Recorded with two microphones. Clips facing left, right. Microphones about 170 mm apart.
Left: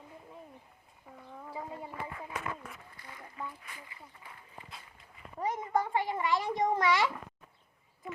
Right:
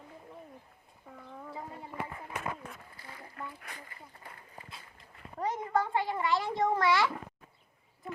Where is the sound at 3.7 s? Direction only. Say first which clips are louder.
Right 1 dB; 45° right (ahead or behind).